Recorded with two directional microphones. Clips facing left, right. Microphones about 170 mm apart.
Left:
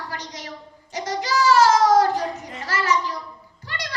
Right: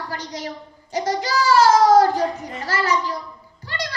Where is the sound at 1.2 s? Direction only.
35° right (ahead or behind).